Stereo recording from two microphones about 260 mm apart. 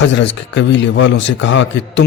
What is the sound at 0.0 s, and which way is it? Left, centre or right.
Speech, left.